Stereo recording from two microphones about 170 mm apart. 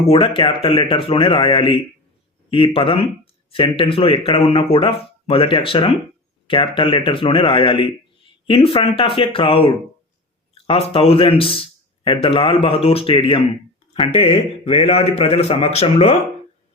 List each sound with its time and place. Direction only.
0.1 s speech: 30° left (ahead or behind)